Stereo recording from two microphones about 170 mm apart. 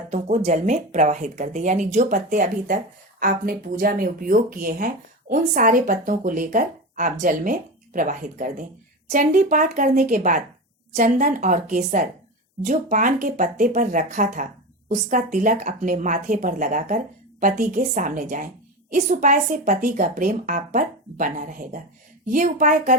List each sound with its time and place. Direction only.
0.1 s speech: 40° right (ahead or behind)